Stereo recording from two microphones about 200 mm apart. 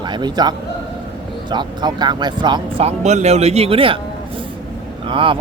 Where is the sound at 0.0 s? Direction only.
20° right (ahead or behind).